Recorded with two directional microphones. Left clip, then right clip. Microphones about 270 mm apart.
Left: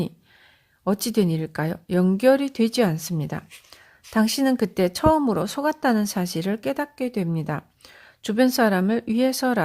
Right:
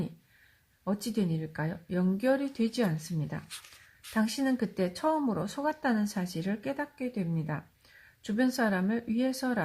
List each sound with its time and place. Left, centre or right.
0.9 s speech: left